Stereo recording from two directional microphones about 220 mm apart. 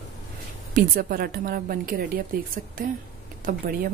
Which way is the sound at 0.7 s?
40° right (ahead or behind).